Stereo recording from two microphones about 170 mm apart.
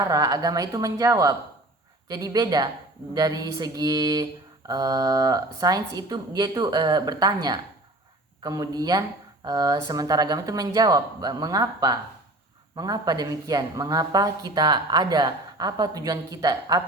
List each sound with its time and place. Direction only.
0.0 s a woman's voice: 20° right (ahead or behind)
8.4 s a woman's voice: 20° right (ahead or behind)